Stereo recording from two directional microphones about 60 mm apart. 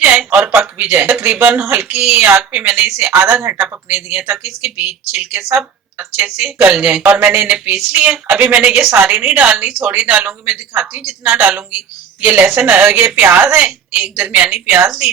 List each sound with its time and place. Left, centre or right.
0.0 s a sound: right
0.8 s speech: right
5.5 s speech: right
6.1 s speech: right
7.7 s a sound: centre
8.3 s speech: right
13.6 s speech: right